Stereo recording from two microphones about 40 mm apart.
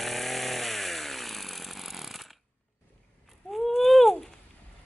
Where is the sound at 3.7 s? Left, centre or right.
Centre.